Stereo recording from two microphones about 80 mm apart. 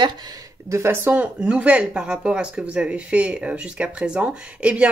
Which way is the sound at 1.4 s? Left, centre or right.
Centre.